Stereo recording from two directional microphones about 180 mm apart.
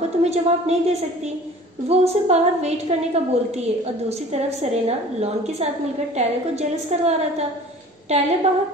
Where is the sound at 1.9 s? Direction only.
35° right (ahead or behind).